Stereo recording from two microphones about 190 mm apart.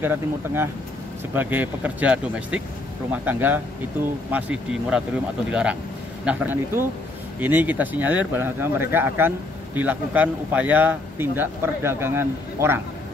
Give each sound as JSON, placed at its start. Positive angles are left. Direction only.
{"t": 0.0, "sound": "speech", "side_deg": -10}